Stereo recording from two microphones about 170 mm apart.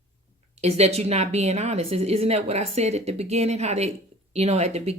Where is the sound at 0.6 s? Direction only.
40° right (ahead or behind).